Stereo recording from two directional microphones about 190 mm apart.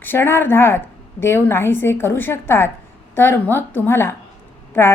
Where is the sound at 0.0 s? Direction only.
10° left (ahead or behind).